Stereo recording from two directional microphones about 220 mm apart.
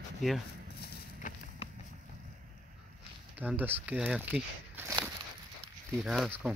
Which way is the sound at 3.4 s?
10° right (ahead or behind).